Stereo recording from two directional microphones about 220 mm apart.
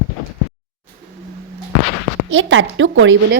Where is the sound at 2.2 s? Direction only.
60° right (ahead or behind).